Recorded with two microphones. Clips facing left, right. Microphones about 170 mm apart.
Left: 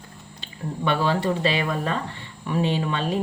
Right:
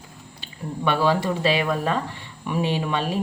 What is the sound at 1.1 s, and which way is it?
A woman's voice, 10° right (ahead or behind).